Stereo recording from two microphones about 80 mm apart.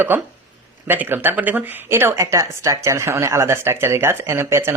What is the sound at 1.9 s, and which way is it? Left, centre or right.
Speech, right.